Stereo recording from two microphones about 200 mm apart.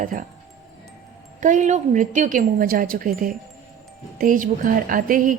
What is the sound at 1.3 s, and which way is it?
Speech, 40° right (ahead or behind).